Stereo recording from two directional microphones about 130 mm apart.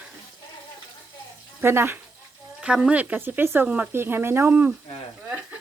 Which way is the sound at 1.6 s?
15° right (ahead or behind).